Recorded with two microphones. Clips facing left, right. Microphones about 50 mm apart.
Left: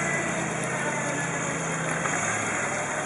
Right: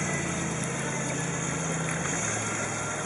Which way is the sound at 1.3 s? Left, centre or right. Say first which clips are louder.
Left 3 dB; left.